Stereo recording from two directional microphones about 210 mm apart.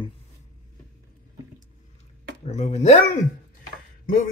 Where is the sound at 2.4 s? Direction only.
30° left (ahead or behind).